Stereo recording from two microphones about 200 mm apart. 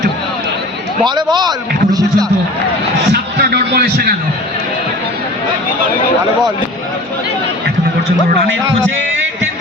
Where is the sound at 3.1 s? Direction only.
55° right (ahead or behind).